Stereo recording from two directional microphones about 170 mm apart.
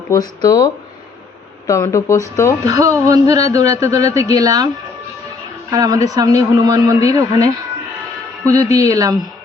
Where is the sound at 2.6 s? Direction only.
20° right (ahead or behind).